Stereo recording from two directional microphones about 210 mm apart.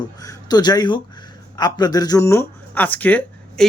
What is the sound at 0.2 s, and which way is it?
Speech, 20° left (ahead or behind).